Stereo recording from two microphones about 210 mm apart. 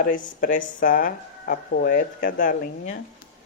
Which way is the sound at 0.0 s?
40° left (ahead or behind).